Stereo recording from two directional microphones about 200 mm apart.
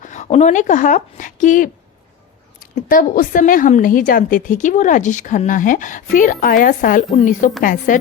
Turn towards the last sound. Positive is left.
turn(degrees=40)  # may be behind; listen again after turning